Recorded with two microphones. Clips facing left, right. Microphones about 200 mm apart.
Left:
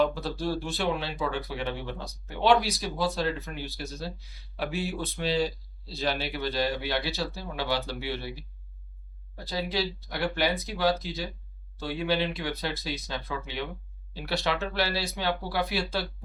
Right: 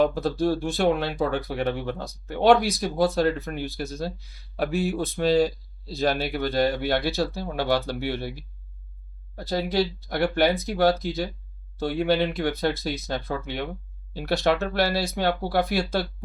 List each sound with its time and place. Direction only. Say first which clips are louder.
0.0 s speech: right 5 dB; 50° right (ahead or behind)